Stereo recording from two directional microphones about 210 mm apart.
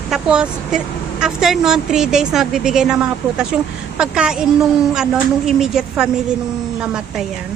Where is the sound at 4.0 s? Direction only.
5° right (ahead or behind).